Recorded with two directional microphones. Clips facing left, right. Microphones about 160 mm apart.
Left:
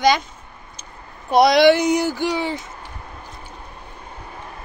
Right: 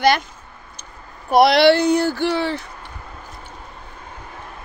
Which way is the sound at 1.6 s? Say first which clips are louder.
Even; 15° left (ahead or behind).